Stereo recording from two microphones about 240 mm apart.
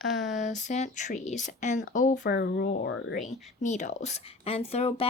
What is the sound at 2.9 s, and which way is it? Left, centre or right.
Speech, left.